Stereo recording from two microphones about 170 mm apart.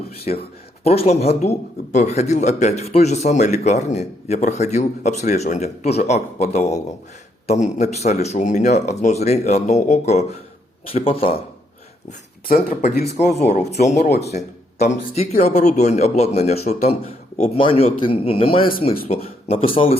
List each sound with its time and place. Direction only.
0.3 s speech: 45° left (ahead or behind)
12.6 s speech: 65° left (ahead or behind)
13.1 s speech: 40° left (ahead or behind)